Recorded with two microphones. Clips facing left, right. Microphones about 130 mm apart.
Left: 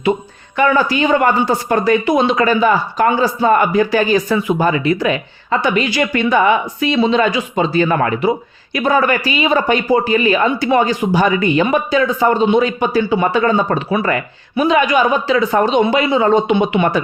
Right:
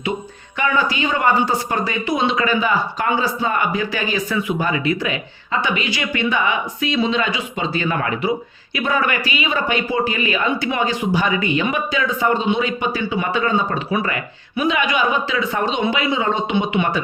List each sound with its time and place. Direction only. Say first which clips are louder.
0.5 s speech: left 6 dB; 45° left (ahead or behind)